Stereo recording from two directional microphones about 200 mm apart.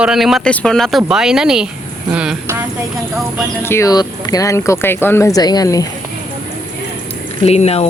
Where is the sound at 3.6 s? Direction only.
15° left (ahead or behind).